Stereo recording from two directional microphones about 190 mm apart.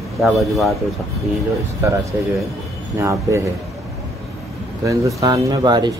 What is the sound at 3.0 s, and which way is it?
Speech, 15° right (ahead or behind).